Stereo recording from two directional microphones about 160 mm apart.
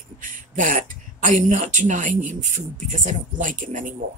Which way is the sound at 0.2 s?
55° right (ahead or behind).